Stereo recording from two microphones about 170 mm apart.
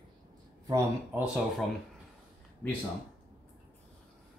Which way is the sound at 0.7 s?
20° right (ahead or behind).